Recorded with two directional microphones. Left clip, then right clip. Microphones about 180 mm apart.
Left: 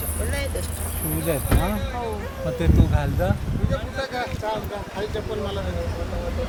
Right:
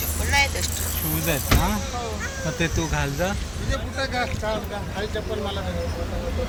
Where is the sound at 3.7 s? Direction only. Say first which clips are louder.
Right 1 dB; 55° left (ahead or behind).